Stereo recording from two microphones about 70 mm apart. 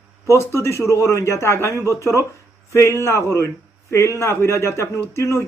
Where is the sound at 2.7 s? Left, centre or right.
Left.